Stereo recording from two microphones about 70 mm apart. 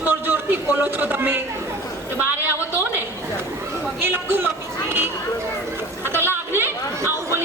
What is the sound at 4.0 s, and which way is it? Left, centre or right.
Speech, right.